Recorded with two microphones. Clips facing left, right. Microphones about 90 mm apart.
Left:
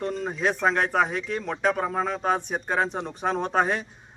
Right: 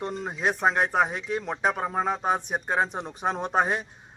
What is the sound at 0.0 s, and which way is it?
A man's voice, 15° right (ahead or behind).